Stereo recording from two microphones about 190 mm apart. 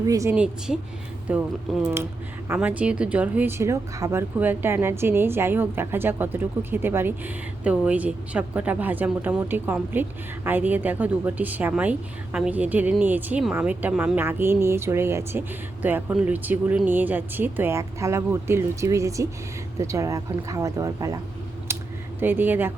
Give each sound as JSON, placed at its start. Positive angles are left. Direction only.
{"t": 0.0, "sound": "a woman's voice", "side_deg": -15}
{"t": 2.5, "sound": "a woman's voice", "side_deg": -10}
{"t": 21.7, "sound": "a sound", "side_deg": -15}
{"t": 22.2, "sound": "a woman's voice", "side_deg": -10}